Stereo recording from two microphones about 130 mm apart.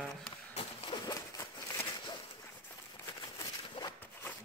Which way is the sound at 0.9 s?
25° left (ahead or behind).